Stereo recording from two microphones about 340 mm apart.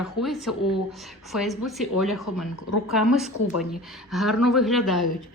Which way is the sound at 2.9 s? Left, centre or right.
Centre.